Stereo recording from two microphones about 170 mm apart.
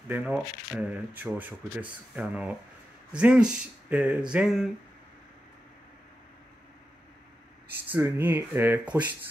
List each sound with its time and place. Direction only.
0.1 s speech: 10° right (ahead or behind)
7.9 s speech: 10° right (ahead or behind)